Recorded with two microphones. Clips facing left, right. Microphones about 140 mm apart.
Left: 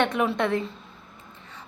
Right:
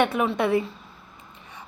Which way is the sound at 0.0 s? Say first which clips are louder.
Right 1 dB; 5° right (ahead or behind).